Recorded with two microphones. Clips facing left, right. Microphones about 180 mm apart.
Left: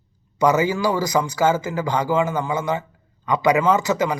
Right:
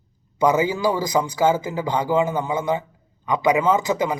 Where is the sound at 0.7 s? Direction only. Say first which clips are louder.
Even; 25° right (ahead or behind).